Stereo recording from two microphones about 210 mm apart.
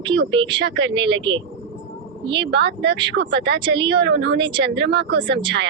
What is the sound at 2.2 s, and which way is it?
Speech, 25° right (ahead or behind).